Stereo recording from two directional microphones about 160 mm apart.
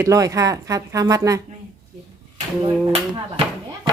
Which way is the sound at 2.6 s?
35° right (ahead or behind).